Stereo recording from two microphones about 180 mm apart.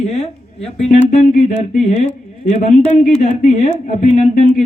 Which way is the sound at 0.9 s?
45° left (ahead or behind).